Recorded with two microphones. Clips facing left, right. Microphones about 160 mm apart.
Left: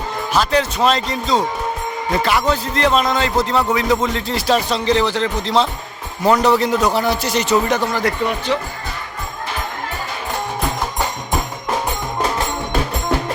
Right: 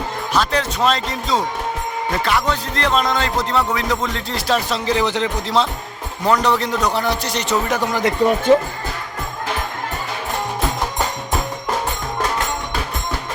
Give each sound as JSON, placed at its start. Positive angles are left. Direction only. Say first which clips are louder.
{"t": 0.3, "sound": "a man's voice", "louder": "left 2 dB", "side_deg": 0}
{"t": 5.0, "sound": "speech", "louder": "left 1 dB", "side_deg": -20}
{"t": 6.2, "sound": "a man's voice", "louder": "left 3 dB", "side_deg": 5}
{"t": 7.8, "sound": "speech", "louder": "even", "side_deg": -15}
{"t": 8.2, "sound": "speech", "louder": "right 6 dB", "side_deg": -40}